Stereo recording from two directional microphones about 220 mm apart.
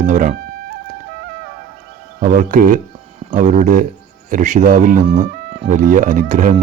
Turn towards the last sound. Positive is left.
turn(degrees=-35)  # may be behind; listen again after turning